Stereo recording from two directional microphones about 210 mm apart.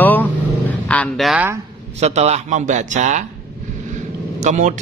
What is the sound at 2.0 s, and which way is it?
Speech, 30° right (ahead or behind).